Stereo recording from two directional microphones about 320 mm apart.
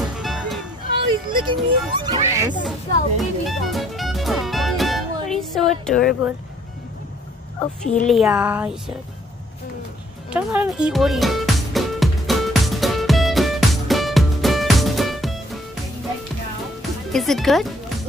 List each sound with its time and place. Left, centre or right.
0.2 s music: centre
1.3 s speech: centre
3.2 s music: centre
7.8 s a woman's voice: left
8.1 s speech: centre
10.3 s music: centre
17.1 s speech: centre